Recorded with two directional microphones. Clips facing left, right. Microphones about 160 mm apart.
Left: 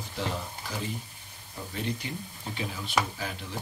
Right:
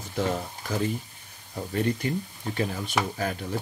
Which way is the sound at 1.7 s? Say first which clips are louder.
Right 8 dB; 50° right (ahead or behind).